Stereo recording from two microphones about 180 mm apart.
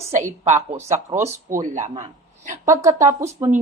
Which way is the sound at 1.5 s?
45° right (ahead or behind).